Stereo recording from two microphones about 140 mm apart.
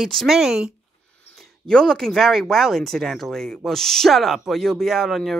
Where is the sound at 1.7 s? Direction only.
5° left (ahead or behind).